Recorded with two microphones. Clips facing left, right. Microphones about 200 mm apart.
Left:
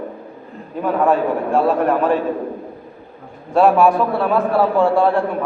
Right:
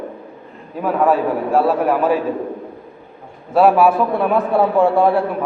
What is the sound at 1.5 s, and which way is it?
Speech, 5° right (ahead or behind).